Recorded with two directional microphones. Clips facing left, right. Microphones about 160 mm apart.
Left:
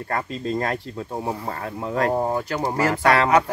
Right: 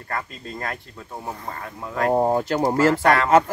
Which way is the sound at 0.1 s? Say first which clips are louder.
Left 6 dB; 35° left (ahead or behind).